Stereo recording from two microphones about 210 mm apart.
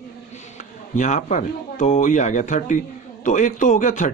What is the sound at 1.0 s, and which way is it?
Speech, 35° left (ahead or behind).